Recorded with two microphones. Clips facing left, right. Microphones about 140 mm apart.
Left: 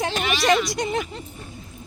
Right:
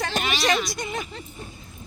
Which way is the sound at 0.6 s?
70° left (ahead or behind).